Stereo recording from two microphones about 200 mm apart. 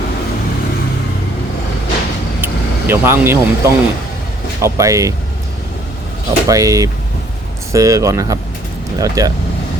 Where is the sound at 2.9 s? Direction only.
10° right (ahead or behind).